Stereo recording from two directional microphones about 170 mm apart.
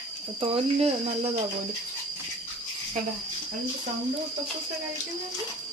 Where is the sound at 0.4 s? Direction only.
35° right (ahead or behind).